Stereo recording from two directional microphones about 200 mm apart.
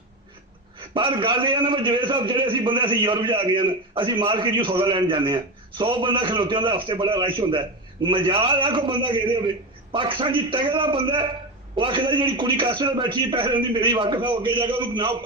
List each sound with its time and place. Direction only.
0.8 s a man's voice: 25° right (ahead or behind)